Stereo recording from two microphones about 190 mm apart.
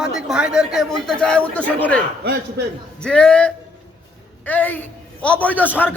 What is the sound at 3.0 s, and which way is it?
A man's voice, 5° left (ahead or behind).